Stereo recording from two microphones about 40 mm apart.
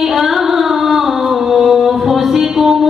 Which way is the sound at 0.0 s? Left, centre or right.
Centre.